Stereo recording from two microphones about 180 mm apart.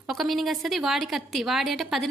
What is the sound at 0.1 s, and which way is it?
A woman's voice, centre (ahead or behind).